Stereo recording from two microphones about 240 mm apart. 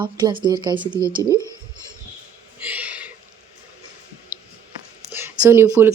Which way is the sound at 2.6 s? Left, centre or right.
Centre.